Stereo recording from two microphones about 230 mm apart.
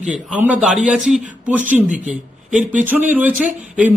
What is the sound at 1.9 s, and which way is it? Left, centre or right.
Speech, right.